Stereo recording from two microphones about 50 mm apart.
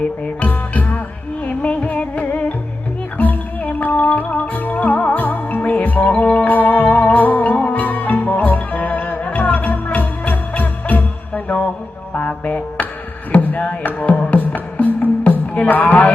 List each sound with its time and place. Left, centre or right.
0.4 s music: left
13.3 s chop: left
13.6 s music: left